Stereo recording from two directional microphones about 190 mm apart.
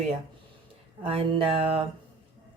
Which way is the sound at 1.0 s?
30° right (ahead or behind).